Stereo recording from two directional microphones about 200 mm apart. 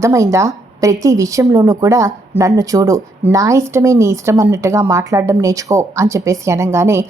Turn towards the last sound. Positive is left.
turn(degrees=-15)  # may be behind; listen again after turning